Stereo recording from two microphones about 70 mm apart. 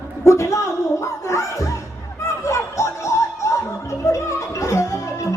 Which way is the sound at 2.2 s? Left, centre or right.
Left.